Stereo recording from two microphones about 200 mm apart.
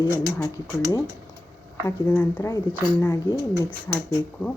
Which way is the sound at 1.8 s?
15° left (ahead or behind).